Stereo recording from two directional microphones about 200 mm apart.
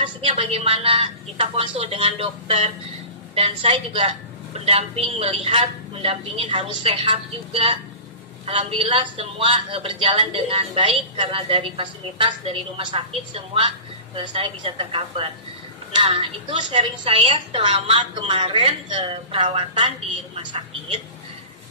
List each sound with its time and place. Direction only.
0.0 s a man's voice: 25° right (ahead or behind)